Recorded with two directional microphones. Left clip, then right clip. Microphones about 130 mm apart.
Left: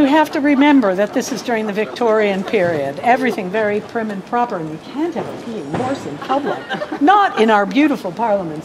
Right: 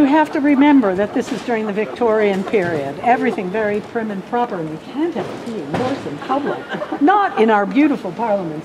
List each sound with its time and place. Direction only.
0.0 s speech: 35° left (ahead or behind)
6.2 s speech: 40° left (ahead or behind)